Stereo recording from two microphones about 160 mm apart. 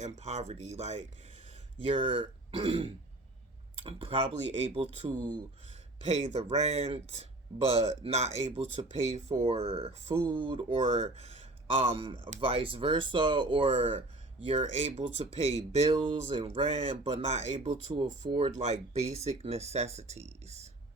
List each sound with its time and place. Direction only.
0.0 s speech: 40° right (ahead or behind)